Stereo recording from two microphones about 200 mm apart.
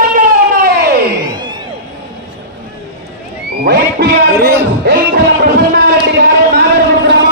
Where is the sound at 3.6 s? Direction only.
55° right (ahead or behind).